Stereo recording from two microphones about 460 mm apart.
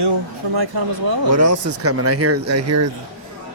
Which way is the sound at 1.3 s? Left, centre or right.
Right.